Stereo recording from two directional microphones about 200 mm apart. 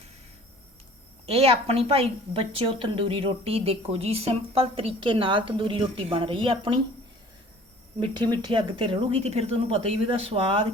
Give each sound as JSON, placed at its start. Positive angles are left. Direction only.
{"t": 1.3, "sound": "a woman's voice", "side_deg": -30}
{"t": 8.3, "sound": "a woman's voice", "side_deg": -20}